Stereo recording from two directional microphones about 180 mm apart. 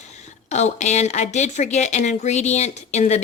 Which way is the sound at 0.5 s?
40° left (ahead or behind).